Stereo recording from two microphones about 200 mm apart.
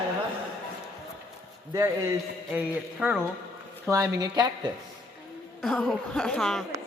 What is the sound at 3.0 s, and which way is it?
Speech, 10° right (ahead or behind).